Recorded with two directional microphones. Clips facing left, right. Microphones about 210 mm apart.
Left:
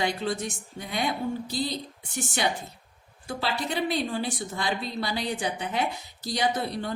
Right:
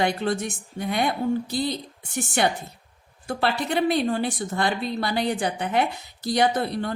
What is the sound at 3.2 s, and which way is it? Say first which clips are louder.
Speech: right 5 dB; 60° right (ahead or behind).